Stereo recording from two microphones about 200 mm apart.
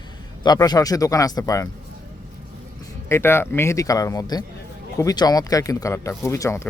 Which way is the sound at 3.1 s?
10° left (ahead or behind).